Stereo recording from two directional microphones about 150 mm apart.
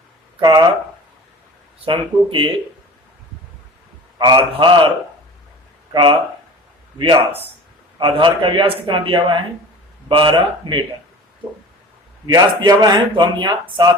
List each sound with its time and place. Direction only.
0.3 s speech: 30° right (ahead or behind)
1.8 s a man's voice: 35° right (ahead or behind)
4.2 s a man's voice: 30° right (ahead or behind)
5.9 s a man's voice: 35° right (ahead or behind)
12.3 s speech: 25° right (ahead or behind)